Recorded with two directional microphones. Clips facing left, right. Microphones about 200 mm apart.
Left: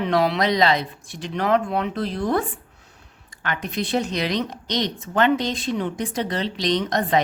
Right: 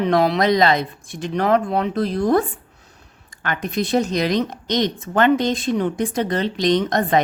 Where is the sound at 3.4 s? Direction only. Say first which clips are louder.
Right 4 dB; 45° right (ahead or behind).